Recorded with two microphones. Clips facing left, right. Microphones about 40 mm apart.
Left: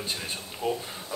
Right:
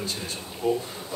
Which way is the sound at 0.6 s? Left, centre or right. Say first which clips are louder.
Right 4 dB; left.